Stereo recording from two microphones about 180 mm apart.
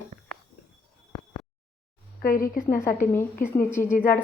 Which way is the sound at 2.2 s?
50° left (ahead or behind).